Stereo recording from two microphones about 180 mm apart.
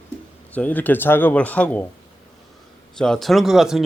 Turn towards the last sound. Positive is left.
turn(degrees=0)  # may be behind; listen again after turning